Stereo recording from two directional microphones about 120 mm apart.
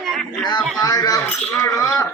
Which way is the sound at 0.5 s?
30° left (ahead or behind).